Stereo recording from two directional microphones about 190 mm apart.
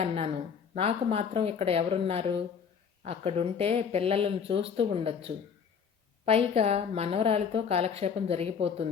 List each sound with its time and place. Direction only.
0.0 s a woman's voice: 35° right (ahead or behind)